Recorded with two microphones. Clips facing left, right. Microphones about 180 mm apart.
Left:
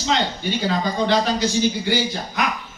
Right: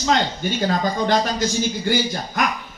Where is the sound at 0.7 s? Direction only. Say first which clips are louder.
Even; 45° right (ahead or behind).